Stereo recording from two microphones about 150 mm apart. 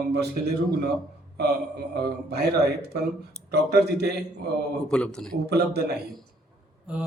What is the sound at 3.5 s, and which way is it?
Speech, 90° right.